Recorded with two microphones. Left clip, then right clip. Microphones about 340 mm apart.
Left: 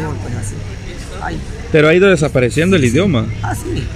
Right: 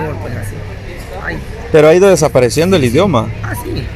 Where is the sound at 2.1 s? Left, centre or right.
Right.